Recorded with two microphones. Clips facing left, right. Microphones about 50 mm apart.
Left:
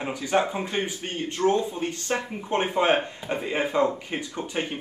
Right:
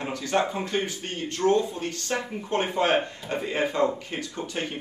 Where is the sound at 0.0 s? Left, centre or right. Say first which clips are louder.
Left 1 dB; centre.